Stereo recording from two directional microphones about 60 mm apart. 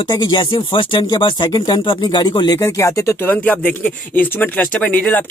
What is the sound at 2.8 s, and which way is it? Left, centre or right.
Speech, left.